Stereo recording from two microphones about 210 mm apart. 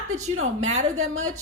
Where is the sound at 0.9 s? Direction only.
80° right.